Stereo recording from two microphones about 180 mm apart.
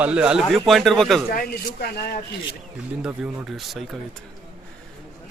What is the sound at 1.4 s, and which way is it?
Speech, 60° left (ahead or behind).